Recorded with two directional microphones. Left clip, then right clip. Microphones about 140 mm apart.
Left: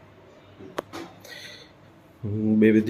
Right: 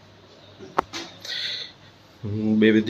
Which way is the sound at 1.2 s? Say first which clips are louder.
Right 12 dB; 25° left (ahead or behind).